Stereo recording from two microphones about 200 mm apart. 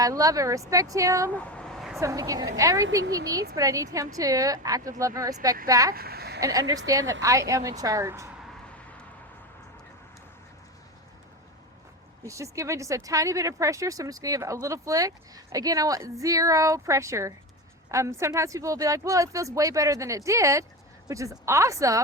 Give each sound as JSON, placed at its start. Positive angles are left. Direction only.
{"t": 0.0, "sound": "speech", "side_deg": -15}
{"t": 1.4, "sound": "a sound", "side_deg": 5}
{"t": 2.0, "sound": "speech", "side_deg": -15}
{"t": 5.9, "sound": "speech", "side_deg": -50}
{"t": 6.4, "sound": "speech", "side_deg": -15}
{"t": 12.2, "sound": "speech", "side_deg": -15}